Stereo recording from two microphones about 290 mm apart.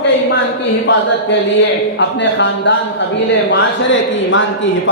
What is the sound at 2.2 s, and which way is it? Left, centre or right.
Speech, left.